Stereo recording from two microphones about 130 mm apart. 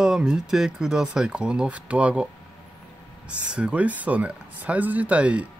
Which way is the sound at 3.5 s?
10° right (ahead or behind).